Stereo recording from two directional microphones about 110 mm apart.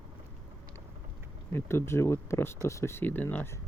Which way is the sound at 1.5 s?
25° left (ahead or behind).